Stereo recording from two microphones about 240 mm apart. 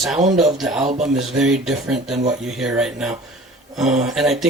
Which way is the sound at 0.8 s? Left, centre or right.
Right.